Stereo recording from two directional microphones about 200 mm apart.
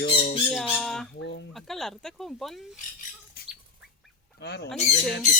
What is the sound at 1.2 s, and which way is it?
Speech, 60° left (ahead or behind).